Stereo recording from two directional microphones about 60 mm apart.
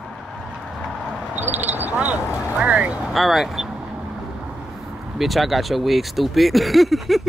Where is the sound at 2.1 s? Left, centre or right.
Right.